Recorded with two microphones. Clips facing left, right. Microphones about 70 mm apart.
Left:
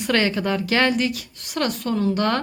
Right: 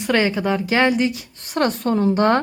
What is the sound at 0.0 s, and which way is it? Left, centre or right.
A woman's voice, centre.